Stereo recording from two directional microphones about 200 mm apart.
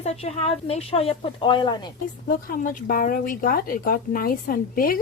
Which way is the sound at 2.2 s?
45° left (ahead or behind).